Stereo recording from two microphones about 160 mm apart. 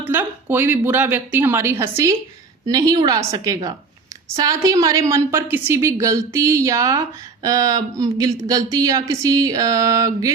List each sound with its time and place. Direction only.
0.0 s a woman's voice: 10° right (ahead or behind)